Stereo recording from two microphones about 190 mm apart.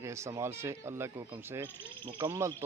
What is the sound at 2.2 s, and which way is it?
Speech, 15° right (ahead or behind).